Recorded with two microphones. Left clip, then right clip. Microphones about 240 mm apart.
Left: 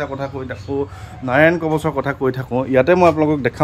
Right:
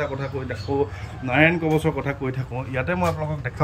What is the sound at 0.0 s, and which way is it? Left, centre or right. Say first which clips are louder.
Speech: left 3 dB; centre.